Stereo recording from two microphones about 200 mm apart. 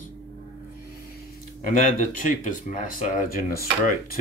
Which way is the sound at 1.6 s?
40° left (ahead or behind).